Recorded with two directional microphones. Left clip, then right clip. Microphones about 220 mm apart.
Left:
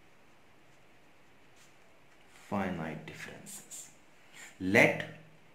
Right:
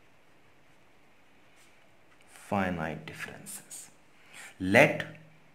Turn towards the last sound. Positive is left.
turn(degrees=-45)  # may be behind; listen again after turning